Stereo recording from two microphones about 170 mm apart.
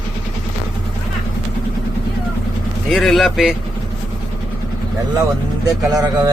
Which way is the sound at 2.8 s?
Centre (ahead or behind).